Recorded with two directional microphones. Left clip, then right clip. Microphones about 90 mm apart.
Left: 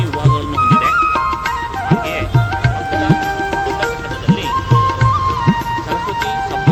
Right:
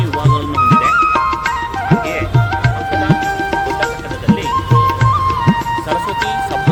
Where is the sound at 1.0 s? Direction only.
30° left (ahead or behind).